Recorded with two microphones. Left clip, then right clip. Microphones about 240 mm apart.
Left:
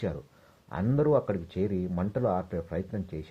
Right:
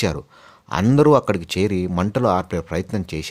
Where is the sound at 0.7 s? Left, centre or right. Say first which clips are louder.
Right 11 dB; right.